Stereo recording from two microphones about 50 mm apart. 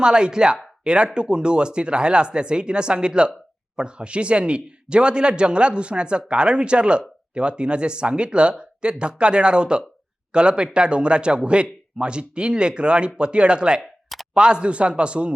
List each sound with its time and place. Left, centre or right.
0.0 s speech: centre